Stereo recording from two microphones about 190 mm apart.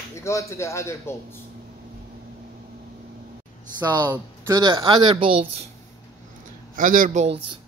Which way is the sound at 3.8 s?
20° right (ahead or behind).